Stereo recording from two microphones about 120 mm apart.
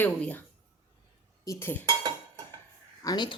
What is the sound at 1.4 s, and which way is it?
Dishes, 20° left (ahead or behind).